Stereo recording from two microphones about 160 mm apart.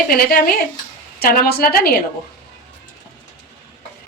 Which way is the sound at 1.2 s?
70° left (ahead or behind).